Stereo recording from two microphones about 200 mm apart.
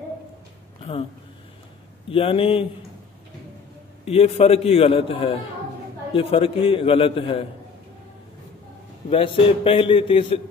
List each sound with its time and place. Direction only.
2.0 s a man's voice: 25° left (ahead or behind)
4.0 s a man's voice: 30° left (ahead or behind)
9.1 s a man's voice: 25° left (ahead or behind)